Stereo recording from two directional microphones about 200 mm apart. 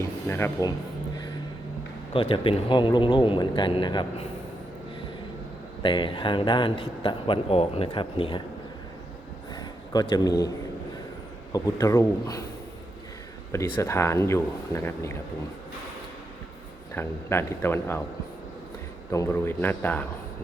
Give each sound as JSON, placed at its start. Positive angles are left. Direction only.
{"t": 0.3, "sound": "speech", "side_deg": 10}
{"t": 2.1, "sound": "speech", "side_deg": 25}
{"t": 5.8, "sound": "speech", "side_deg": 25}
{"t": 9.6, "sound": "speech", "side_deg": 20}
{"t": 11.5, "sound": "speech", "side_deg": 15}
{"t": 13.5, "sound": "speech", "side_deg": 15}
{"t": 16.9, "sound": "speech", "side_deg": 10}
{"t": 19.1, "sound": "speech", "side_deg": 15}